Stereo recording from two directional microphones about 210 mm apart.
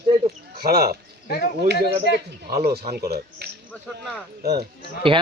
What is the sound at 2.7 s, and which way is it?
Speech, 50° right (ahead or behind).